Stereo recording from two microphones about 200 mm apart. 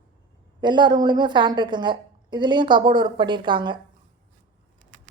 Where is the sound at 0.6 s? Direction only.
20° right (ahead or behind).